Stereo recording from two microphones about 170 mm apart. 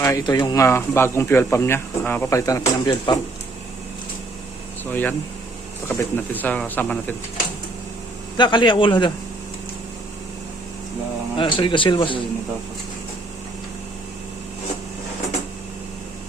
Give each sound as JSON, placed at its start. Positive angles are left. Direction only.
{"t": 0.0, "sound": "speech", "side_deg": 20}
{"t": 4.9, "sound": "speech", "side_deg": 10}
{"t": 8.4, "sound": "a man's voice", "side_deg": 25}
{"t": 11.3, "sound": "a man's voice", "side_deg": 30}